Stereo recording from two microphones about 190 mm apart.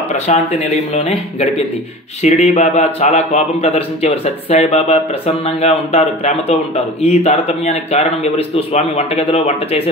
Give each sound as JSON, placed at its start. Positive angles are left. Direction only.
{"t": 0.1, "sound": "a man's voice", "side_deg": 35}